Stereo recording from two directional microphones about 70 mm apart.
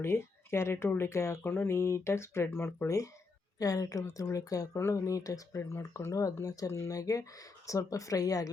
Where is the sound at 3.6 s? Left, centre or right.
Left.